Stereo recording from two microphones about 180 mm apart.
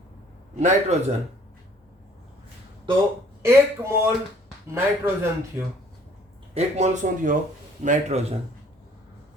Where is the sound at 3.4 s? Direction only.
15° right (ahead or behind).